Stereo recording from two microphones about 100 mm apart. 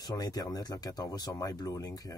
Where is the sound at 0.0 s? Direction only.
40° left (ahead or behind).